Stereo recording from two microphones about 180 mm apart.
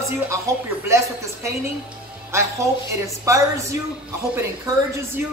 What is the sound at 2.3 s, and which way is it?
Speech, 15° right (ahead or behind).